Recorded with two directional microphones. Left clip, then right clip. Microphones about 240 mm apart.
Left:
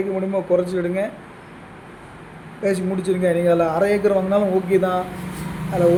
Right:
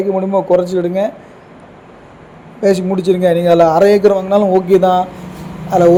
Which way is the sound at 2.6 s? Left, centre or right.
Right.